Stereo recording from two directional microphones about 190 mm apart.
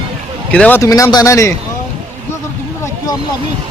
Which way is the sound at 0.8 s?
15° left (ahead or behind).